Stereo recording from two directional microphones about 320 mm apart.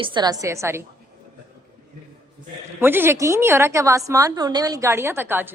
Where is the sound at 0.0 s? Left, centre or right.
Centre.